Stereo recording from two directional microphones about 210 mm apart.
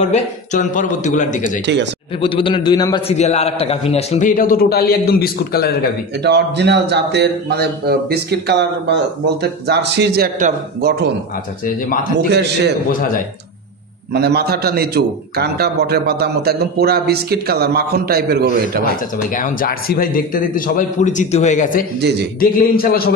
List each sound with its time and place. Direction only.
0.0 s a man's voice: 35° left (ahead or behind)
2.1 s a man's voice: 25° left (ahead or behind)
3.2 s a man's voice: 30° left (ahead or behind)
4.4 s a man's voice: 45° left (ahead or behind)
6.2 s a man's voice: 55° right (ahead or behind)
11.6 s a man's voice: 40° left (ahead or behind)
12.3 s a man's voice: 55° right (ahead or behind)
14.1 s a man's voice: 50° right (ahead or behind)
19.3 s a man's voice: 40° left (ahead or behind)